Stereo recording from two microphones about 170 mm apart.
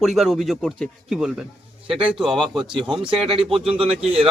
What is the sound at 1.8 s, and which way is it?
A man's voice, 30° right (ahead or behind).